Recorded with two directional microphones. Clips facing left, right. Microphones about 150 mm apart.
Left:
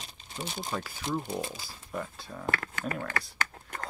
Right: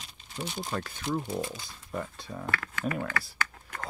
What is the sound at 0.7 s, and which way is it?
Speech, 5° left (ahead or behind).